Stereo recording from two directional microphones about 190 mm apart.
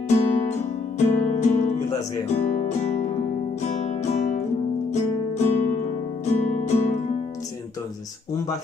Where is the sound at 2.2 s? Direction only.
35° left (ahead or behind).